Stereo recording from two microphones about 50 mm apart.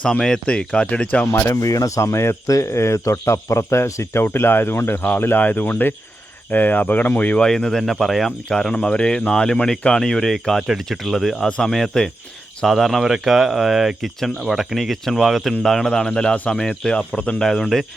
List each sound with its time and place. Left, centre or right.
0.2 s speech: centre
1.4 s speech: left
4.2 s speech: left
7.3 s speech: centre
8.7 s speech: left; by 11.4 s centre
11.4 s speech: centre
17.4 s speech: centre